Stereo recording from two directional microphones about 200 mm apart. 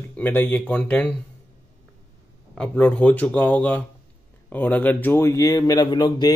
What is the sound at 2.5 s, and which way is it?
A man's voice, 5° left (ahead or behind).